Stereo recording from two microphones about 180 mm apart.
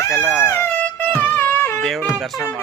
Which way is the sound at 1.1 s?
10° left (ahead or behind).